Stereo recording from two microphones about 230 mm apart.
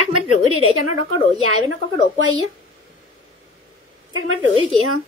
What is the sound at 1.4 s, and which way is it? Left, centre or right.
Speech, right.